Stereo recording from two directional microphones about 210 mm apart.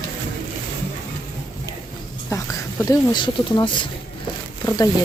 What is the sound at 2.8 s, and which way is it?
Speech, 20° left (ahead or behind).